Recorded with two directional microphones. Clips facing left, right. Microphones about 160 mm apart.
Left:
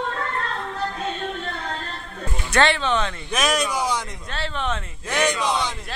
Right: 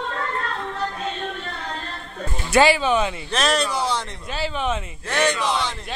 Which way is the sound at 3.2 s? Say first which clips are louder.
Right 1 dB; 10° left (ahead or behind).